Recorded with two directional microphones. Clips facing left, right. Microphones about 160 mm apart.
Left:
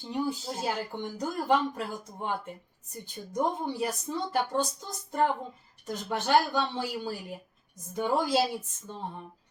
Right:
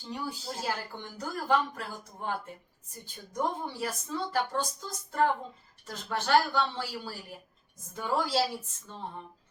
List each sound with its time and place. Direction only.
0.0 s speech: 20° left (ahead or behind)
3.3 s speech: 20° left (ahead or behind)